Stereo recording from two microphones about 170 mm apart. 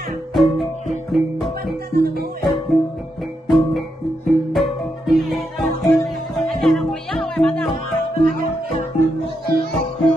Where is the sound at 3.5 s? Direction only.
Centre (ahead or behind).